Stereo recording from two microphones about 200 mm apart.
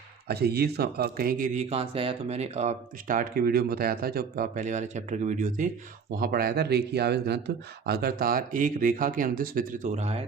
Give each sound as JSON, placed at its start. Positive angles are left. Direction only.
{"t": 0.3, "sound": "a man's voice", "side_deg": -55}